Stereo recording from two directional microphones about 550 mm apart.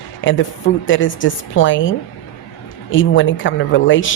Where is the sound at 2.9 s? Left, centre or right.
Left.